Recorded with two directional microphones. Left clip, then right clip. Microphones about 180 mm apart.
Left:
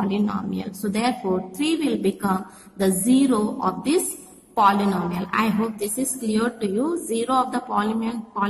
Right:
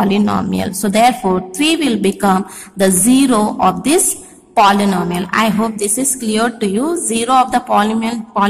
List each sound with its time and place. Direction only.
0.0 s a woman's voice: 25° right (ahead or behind)